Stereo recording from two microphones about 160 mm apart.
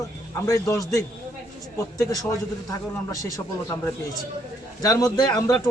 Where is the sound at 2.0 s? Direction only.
20° left (ahead or behind).